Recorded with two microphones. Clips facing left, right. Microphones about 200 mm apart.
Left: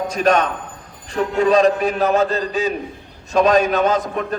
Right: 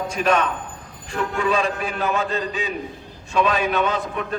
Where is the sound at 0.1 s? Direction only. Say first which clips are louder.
Left 3 dB; 40° left (ahead or behind).